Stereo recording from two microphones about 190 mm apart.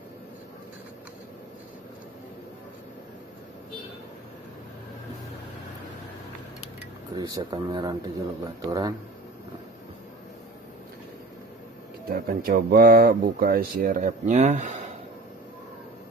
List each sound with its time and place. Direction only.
7.2 s speech: 20° right (ahead or behind)
12.1 s speech: 50° right (ahead or behind)